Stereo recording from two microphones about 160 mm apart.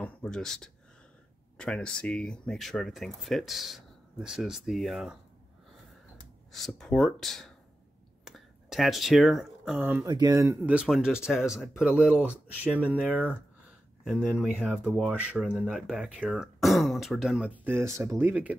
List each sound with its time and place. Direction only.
0.0 s speech: 5° left (ahead or behind)
6.5 s speech: centre (ahead or behind)
10.0 s speech: 25° right (ahead or behind)